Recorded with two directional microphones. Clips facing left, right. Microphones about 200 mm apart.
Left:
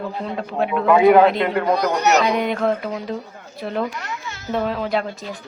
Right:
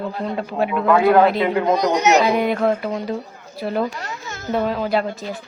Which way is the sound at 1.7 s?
20° right (ahead or behind).